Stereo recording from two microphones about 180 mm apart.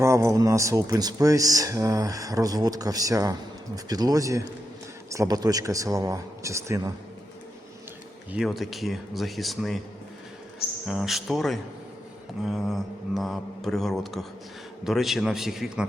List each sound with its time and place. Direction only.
0.0 s speech: 15° right (ahead or behind)
8.3 s speech: centre (ahead or behind)
10.8 s speech: centre (ahead or behind)